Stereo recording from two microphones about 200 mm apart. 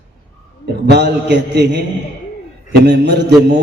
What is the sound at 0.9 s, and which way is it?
A man's voice, 60° right (ahead or behind).